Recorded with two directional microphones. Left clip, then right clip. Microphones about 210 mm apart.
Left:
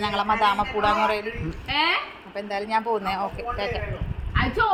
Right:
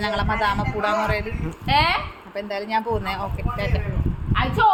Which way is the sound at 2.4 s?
15° right (ahead or behind).